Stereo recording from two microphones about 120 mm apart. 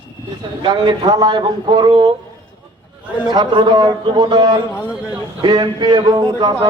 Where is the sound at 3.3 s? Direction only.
40° right (ahead or behind).